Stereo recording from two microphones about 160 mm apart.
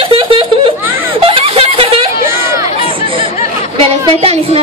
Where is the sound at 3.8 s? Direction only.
35° right (ahead or behind).